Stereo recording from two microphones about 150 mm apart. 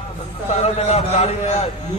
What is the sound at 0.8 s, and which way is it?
Speech, 45° left (ahead or behind).